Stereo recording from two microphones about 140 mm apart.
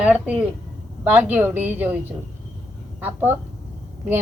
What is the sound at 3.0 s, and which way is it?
Speech, 15° right (ahead or behind).